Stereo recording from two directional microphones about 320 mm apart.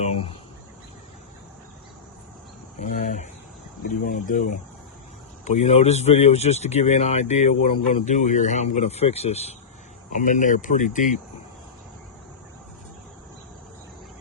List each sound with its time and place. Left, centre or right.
0.0 s speech: centre
2.8 s speech: left